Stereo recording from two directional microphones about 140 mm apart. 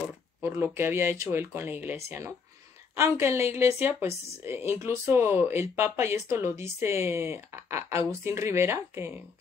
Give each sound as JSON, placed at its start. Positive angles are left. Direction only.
{"t": 0.4, "sound": "speech", "side_deg": -15}